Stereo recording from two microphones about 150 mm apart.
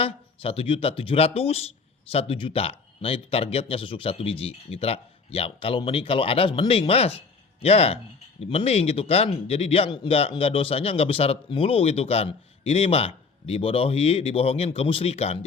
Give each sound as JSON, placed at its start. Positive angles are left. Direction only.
{"t": 0.0, "sound": "speech", "side_deg": 40}